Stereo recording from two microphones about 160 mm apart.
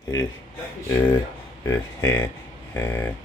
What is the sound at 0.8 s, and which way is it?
Speech, 15° left (ahead or behind).